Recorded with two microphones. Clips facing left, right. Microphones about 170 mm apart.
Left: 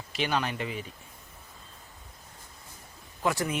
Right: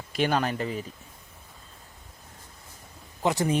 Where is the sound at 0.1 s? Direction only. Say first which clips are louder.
Right 4 dB; 45° right (ahead or behind).